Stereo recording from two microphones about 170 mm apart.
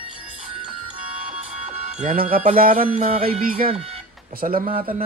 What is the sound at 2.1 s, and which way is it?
Speech, 60° right (ahead or behind).